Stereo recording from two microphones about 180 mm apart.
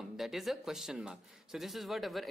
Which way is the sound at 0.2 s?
Centre (ahead or behind).